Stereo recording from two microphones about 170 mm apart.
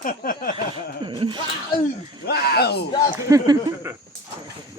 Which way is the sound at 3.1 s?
15° right (ahead or behind).